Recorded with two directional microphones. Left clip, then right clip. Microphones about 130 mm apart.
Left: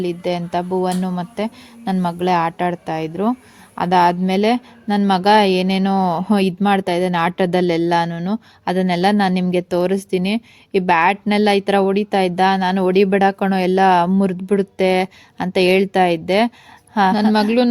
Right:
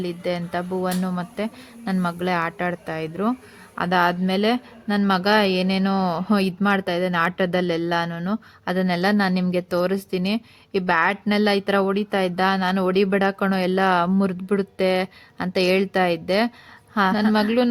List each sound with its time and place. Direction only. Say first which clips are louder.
0.0 s speech: left 5 dB; 35° left (ahead or behind)